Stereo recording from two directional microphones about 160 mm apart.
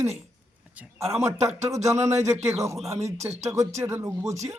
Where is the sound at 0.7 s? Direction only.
10° right (ahead or behind).